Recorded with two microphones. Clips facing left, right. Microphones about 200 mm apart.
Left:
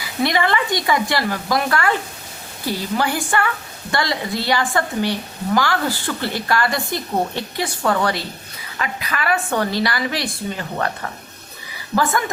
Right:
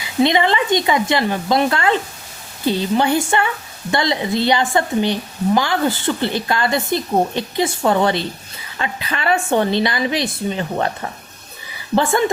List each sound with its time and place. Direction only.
0.0 s a woman's voice: 20° right (ahead or behind)